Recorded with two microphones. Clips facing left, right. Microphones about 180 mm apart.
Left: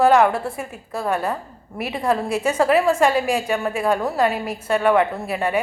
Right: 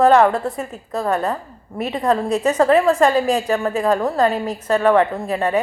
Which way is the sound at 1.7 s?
10° left (ahead or behind).